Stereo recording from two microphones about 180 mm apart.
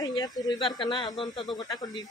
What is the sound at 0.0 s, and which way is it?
Speech, 25° left (ahead or behind).